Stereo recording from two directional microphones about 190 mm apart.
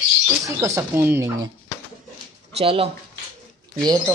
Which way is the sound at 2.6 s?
30° right (ahead or behind).